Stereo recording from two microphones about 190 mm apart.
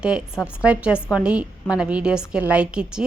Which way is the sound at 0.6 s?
5° right (ahead or behind).